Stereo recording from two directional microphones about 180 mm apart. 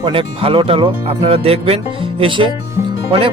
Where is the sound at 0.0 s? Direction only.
30° right (ahead or behind).